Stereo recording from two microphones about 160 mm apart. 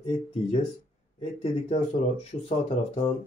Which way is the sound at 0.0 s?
40° left (ahead or behind).